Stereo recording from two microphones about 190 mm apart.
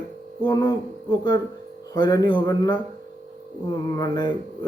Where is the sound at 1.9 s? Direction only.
20° left (ahead or behind).